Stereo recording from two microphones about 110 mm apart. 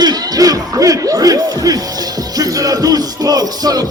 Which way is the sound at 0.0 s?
35° right (ahead or behind).